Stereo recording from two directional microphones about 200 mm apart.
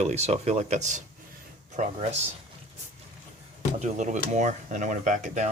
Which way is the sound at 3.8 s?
35° right (ahead or behind).